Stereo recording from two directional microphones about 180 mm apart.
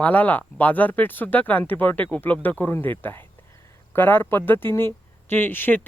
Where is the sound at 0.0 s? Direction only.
10° left (ahead or behind).